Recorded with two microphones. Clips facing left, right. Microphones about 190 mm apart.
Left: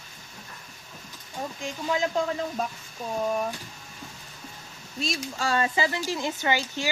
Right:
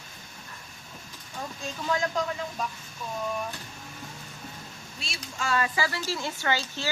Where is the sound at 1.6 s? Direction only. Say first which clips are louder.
Left 1 dB; 20° left (ahead or behind).